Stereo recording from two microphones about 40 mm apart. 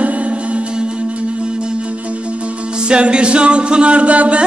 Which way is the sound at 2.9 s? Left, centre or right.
Right.